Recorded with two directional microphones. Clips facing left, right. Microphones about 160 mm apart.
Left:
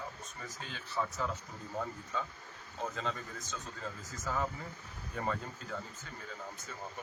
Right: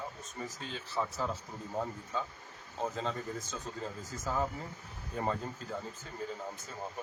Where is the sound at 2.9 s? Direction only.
35° right (ahead or behind).